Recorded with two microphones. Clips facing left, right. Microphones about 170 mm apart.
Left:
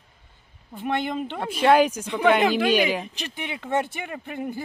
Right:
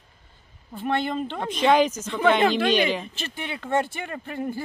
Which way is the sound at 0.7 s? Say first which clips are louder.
Right 1 dB; 15° left (ahead or behind).